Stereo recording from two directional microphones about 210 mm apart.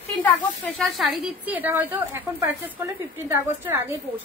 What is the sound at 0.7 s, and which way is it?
A woman's voice, centre (ahead or behind).